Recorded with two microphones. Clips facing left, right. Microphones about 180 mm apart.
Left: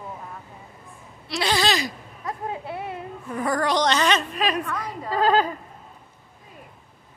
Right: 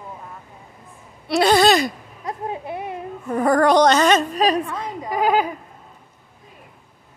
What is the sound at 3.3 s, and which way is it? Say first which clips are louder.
Speech: right 8 dB; 50° right (ahead or behind).